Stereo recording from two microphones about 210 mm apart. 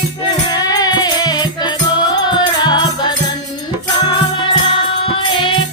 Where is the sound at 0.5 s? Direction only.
15° left (ahead or behind).